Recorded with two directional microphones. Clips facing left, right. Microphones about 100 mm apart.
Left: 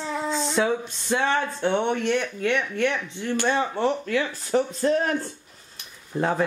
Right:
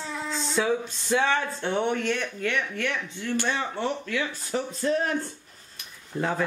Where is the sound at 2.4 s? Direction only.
30° left (ahead or behind).